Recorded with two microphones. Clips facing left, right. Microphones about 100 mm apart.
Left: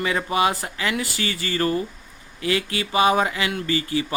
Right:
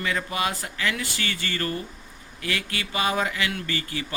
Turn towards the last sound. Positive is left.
turn(degrees=20)  # may be behind; listen again after turning